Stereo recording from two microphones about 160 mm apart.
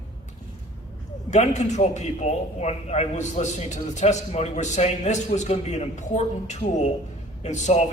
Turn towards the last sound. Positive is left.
turn(degrees=45)  # may be behind; listen again after turning